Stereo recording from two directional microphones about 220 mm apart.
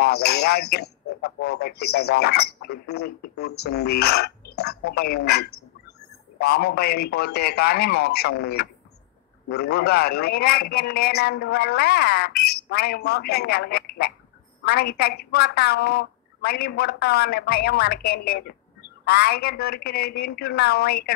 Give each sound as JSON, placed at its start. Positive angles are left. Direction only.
{"t": 0.0, "sound": "a man's voice", "side_deg": 45}